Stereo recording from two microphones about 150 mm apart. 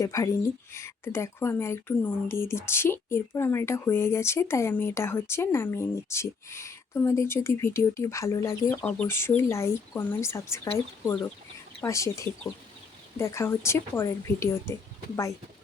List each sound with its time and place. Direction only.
0.0 s speech: 20° left (ahead or behind)